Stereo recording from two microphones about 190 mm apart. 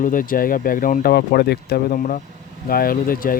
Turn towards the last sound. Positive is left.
turn(degrees=50)  # may be behind; listen again after turning